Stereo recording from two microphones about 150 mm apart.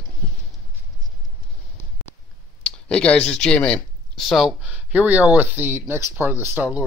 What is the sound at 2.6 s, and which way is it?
Speech, 5° left (ahead or behind).